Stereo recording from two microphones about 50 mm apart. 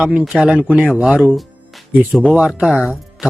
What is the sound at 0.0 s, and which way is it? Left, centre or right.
Speech, right.